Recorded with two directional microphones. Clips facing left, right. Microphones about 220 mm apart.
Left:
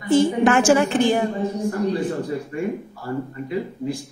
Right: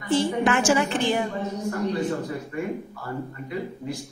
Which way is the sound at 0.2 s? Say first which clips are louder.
Left 5 dB; 50° left (ahead or behind).